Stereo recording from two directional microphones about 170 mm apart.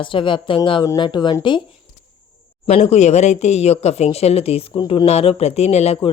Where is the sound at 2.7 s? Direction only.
40° left (ahead or behind).